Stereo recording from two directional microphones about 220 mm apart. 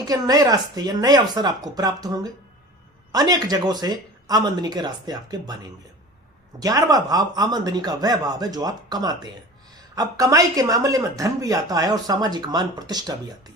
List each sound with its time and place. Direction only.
0.1 s speech: 15° right (ahead or behind)
6.6 s speech: 15° right (ahead or behind)